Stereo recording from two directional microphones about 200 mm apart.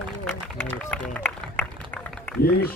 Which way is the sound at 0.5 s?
10° left (ahead or behind).